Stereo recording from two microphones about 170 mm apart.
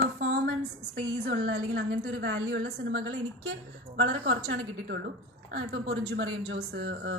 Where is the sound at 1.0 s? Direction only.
70° right (ahead or behind).